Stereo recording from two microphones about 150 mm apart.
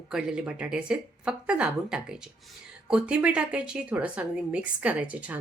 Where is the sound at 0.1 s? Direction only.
5° right (ahead or behind).